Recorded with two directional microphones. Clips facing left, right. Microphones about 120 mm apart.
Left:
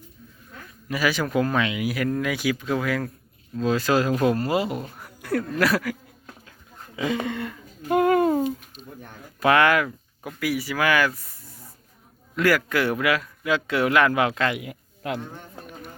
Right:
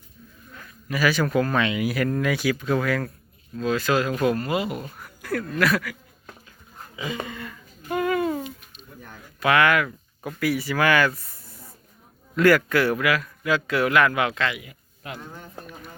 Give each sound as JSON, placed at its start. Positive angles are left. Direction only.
{"t": 0.9, "sound": "speech", "side_deg": 20}
{"t": 3.5, "sound": "speech", "side_deg": 30}
{"t": 4.8, "sound": "a sound", "side_deg": 25}
{"t": 5.5, "sound": "speech", "side_deg": 30}
{"t": 6.9, "sound": "speech", "side_deg": 60}
{"t": 7.3, "sound": "a sound", "side_deg": 65}
{"t": 9.4, "sound": "speech", "side_deg": 30}
{"t": 10.2, "sound": "a man's voice", "side_deg": 15}
{"t": 14.5, "sound": "speech", "side_deg": 70}